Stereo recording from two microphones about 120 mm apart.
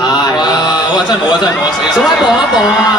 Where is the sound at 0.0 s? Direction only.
35° left (ahead or behind).